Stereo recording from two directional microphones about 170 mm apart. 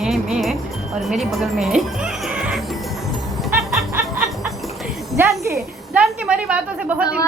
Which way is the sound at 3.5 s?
15° right (ahead or behind).